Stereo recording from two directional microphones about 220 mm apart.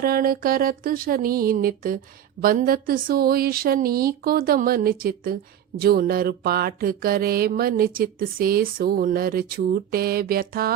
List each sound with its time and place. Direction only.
0.0 s speech: 40° right (ahead or behind)
5.8 s mantra: 40° right (ahead or behind)